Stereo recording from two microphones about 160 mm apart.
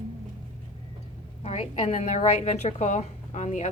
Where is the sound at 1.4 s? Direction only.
40° left (ahead or behind).